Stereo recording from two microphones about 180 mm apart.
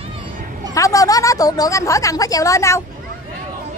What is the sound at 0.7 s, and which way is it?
A woman's voice, 20° left (ahead or behind).